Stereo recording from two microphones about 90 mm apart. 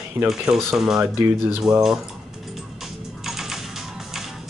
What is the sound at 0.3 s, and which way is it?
Speech, 5° right (ahead or behind).